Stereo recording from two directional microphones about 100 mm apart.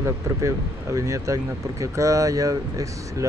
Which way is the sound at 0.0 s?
30° right (ahead or behind).